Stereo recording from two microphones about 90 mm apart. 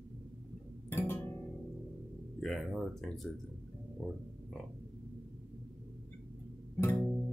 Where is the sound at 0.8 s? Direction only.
25° left (ahead or behind).